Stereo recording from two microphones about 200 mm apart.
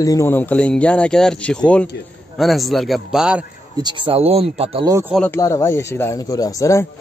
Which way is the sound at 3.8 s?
25° right (ahead or behind).